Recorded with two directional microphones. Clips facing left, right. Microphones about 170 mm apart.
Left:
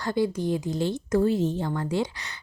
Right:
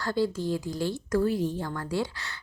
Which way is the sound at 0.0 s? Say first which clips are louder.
Left 2 dB; 20° left (ahead or behind).